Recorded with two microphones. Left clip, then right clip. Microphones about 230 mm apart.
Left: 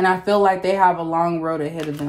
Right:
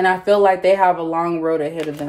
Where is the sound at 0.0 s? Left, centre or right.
Left.